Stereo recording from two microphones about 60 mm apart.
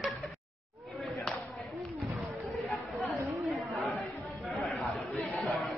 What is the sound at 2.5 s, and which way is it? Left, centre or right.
Chatter, centre.